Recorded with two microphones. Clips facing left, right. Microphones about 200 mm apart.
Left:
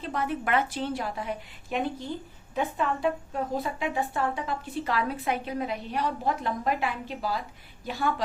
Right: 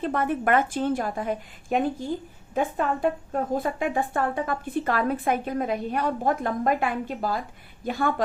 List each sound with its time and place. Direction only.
0.0 s speech: 55° right (ahead or behind)